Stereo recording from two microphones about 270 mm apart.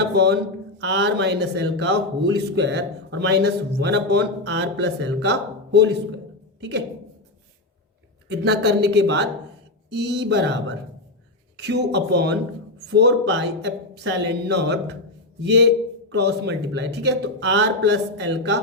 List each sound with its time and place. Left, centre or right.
0.0 s a sound: right
0.8 s a man's voice: right
8.4 s a man's voice: right